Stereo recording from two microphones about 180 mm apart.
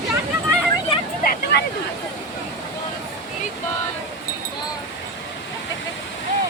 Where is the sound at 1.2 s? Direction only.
65° left (ahead or behind).